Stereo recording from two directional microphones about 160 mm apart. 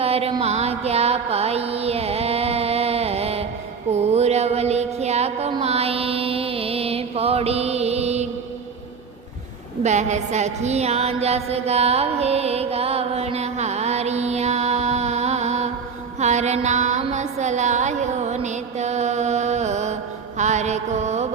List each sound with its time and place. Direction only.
0.0 s music: 40° right (ahead or behind)
9.8 s a sound: 45° right (ahead or behind)
20.4 s mantra: 45° right (ahead or behind)